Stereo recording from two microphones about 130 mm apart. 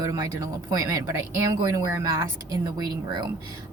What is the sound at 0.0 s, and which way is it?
Speech, 25° right (ahead or behind).